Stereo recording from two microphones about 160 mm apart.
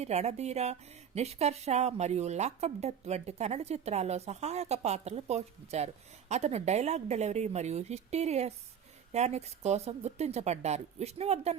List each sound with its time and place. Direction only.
0.0 s a woman's voice: 45° right (ahead or behind)